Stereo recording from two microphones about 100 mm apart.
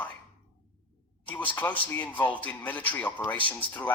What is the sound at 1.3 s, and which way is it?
Speech, 15° left (ahead or behind).